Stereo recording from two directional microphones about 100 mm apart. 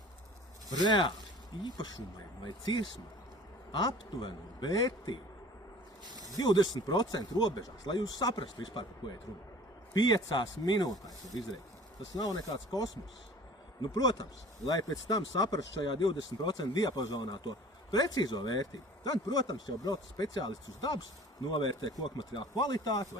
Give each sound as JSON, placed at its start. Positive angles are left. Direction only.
{"t": 0.9, "sound": "speech", "side_deg": 50}
{"t": 2.4, "sound": "speech", "side_deg": 45}
{"t": 6.3, "sound": "speech", "side_deg": 45}
{"t": 8.4, "sound": "speech", "side_deg": 55}
{"t": 12.1, "sound": "speech", "side_deg": 40}